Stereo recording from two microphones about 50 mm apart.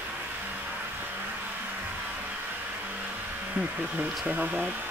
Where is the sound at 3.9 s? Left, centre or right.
Right.